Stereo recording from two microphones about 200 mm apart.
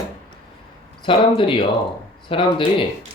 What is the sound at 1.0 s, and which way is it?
Speech, 25° left (ahead or behind).